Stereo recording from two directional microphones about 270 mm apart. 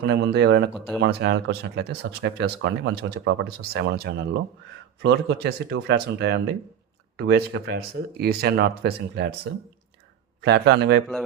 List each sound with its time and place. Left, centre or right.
0.0 s speech: right